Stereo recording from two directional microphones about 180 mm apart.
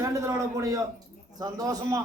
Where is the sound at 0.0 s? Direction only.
15° right (ahead or behind).